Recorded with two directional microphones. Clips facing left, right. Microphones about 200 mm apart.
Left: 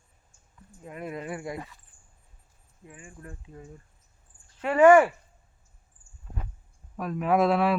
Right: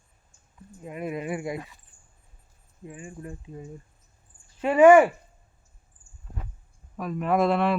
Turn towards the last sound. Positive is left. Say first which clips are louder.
# even
turn(degrees=0)  # may be behind; listen again after turning